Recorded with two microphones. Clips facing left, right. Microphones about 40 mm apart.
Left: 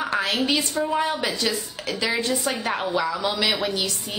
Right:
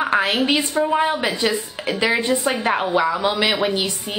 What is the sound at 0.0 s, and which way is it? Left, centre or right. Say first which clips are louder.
A woman's voice: right 5 dB; right.